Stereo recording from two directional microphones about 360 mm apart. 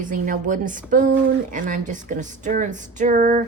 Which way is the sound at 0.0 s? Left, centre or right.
Right.